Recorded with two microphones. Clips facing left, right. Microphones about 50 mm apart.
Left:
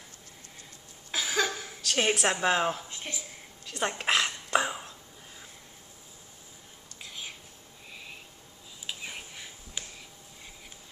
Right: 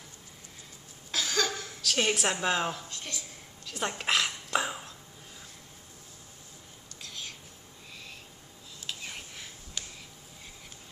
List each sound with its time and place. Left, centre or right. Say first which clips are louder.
1.1 s a sound: left 1 dB; centre
2.3 s speech: left 3 dB; centre
2.7 s speech: left 2 dB; left
3.6 s throat clearing: left 2 dB; centre
7.0 s whispering: left 1 dB; centre
7.9 s owl: left 2 dB; centre
8.8 s a sound: left 1 dB; centre